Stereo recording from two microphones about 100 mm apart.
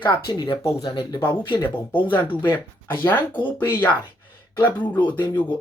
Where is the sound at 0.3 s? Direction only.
55° left (ahead or behind).